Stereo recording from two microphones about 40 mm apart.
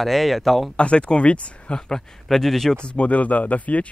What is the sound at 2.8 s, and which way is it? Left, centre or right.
Speech, left.